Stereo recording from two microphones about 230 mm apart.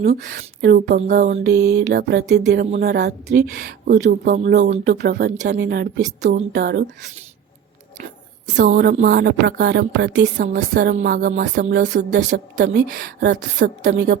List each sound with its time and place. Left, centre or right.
0.2 s speech: right
4.8 s speech: right
8.5 s speech: right